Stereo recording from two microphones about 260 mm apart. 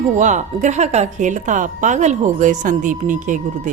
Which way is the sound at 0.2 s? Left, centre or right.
Right.